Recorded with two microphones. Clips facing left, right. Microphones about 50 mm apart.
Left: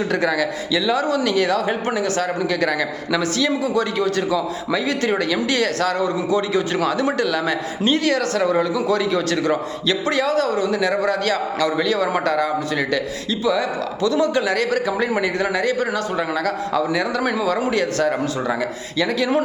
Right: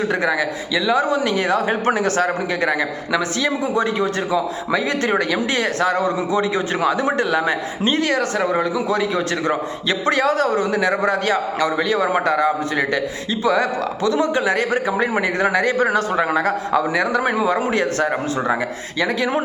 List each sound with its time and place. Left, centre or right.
0.1 s a man's voice: centre